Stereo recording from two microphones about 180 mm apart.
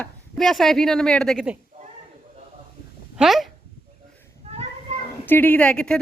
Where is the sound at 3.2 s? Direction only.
Centre (ahead or behind).